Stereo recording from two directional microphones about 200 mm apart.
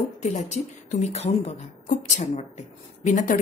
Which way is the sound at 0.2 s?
35° left (ahead or behind).